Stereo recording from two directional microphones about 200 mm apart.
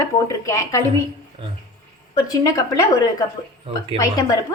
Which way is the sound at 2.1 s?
20° left (ahead or behind).